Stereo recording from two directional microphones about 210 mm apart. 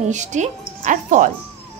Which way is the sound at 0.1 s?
35° right (ahead or behind).